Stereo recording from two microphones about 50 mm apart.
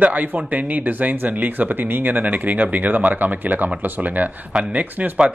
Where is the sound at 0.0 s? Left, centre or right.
Right.